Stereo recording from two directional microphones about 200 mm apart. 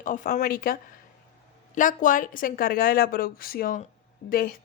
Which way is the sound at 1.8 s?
40° left (ahead or behind).